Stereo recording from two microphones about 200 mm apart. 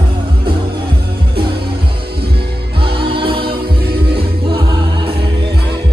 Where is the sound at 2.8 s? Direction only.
25° right (ahead or behind).